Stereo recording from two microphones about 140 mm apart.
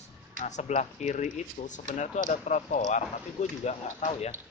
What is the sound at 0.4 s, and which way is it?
Speech, 55° left (ahead or behind).